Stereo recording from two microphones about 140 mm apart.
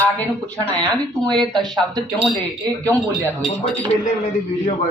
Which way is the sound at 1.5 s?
30° right (ahead or behind).